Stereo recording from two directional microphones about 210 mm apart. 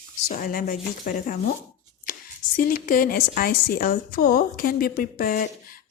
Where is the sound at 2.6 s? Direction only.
45° left (ahead or behind).